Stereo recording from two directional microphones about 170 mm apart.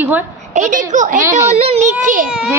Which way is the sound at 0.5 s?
45° right (ahead or behind).